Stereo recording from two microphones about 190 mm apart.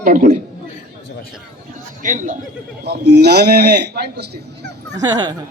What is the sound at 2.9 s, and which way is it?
Speech, 60° right (ahead or behind).